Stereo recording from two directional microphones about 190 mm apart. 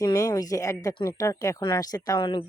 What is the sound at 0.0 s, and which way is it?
Speech, 20° left (ahead or behind).